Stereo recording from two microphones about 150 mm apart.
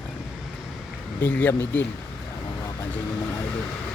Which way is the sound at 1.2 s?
15° left (ahead or behind).